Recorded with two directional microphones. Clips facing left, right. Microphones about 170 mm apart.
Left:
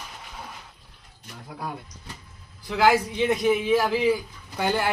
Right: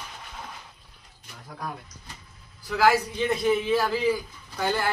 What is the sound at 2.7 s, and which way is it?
A man's voice, 20° left (ahead or behind).